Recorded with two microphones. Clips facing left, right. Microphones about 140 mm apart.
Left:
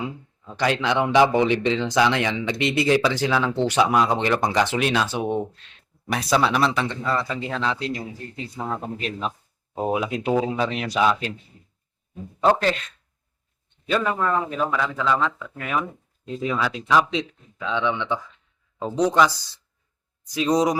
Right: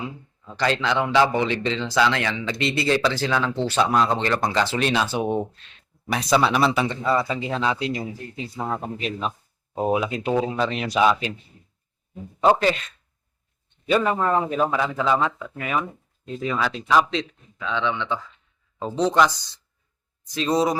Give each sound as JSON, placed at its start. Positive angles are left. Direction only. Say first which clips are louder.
{"t": 0.5, "sound": "speech", "louder": "left 1 dB", "side_deg": 15}
{"t": 3.8, "sound": "speech", "louder": "even", "side_deg": 10}
{"t": 4.8, "sound": "speech", "louder": "even", "side_deg": 0}
{"t": 10.8, "sound": "speech", "louder": "right 2 dB", "side_deg": -10}
{"t": 12.5, "sound": "speech", "louder": "right 1 dB", "side_deg": -5}
{"t": 13.9, "sound": "speech", "louder": "right 2 dB", "side_deg": -20}
{"t": 15.6, "sound": "speech", "louder": "even", "side_deg": 0}
{"t": 17.1, "sound": "speech", "louder": "even", "side_deg": 10}
{"t": 19.1, "sound": "speech", "louder": "right 1 dB", "side_deg": 0}
{"t": 20.3, "sound": "speech", "louder": "left 1 dB", "side_deg": 15}